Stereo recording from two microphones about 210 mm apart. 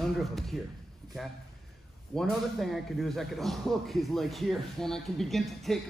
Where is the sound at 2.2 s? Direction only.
Centre (ahead or behind).